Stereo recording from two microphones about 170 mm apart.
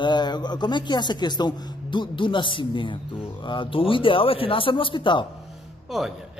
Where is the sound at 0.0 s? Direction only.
25° left (ahead or behind).